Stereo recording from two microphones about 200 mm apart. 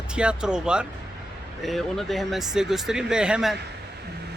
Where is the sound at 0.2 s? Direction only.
5° right (ahead or behind).